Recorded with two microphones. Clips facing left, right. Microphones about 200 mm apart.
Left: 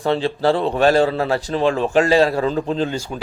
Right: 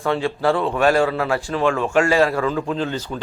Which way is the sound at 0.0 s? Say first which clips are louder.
Left 2 dB; 35° left (ahead or behind).